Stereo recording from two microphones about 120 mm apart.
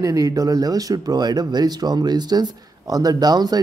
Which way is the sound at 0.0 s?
30° right (ahead or behind).